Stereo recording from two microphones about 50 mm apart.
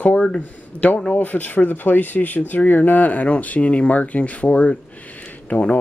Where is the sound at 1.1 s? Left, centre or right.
Left.